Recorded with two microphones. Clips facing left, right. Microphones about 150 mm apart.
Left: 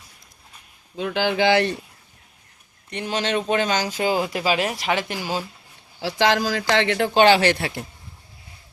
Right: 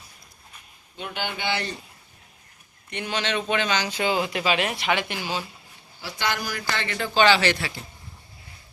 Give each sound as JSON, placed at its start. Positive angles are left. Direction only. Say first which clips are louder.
{"t": 1.1, "sound": "speech", "louder": "left 10 dB", "side_deg": 90}
{"t": 2.9, "sound": "speech", "louder": "left 4 dB", "side_deg": 40}
{"t": 6.0, "sound": "speech", "louder": "left 9 dB", "side_deg": 90}